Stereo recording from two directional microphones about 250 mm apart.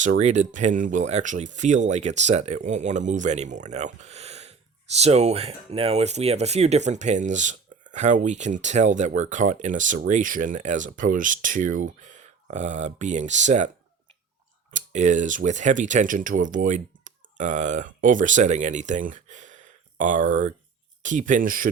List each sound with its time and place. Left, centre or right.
0.0 s speech: right
14.7 s speech: right